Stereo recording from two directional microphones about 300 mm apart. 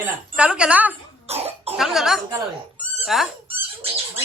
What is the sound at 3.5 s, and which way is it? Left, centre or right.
Rodents, centre.